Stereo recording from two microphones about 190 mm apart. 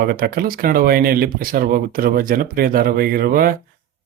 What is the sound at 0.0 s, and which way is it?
Speech, 55° right (ahead or behind).